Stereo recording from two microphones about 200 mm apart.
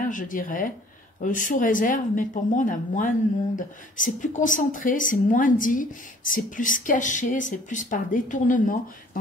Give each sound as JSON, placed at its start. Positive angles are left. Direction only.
{"t": 0.0, "sound": "speech", "side_deg": 40}